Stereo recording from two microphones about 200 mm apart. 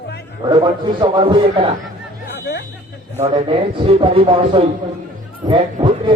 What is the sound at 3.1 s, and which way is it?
Speech, 30° right (ahead or behind).